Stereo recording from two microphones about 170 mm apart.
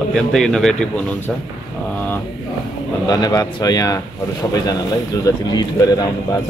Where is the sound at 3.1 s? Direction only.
25° left (ahead or behind).